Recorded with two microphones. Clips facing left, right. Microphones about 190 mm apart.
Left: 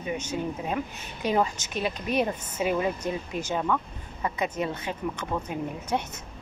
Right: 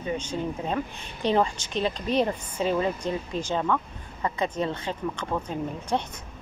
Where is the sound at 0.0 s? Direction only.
10° left (ahead or behind).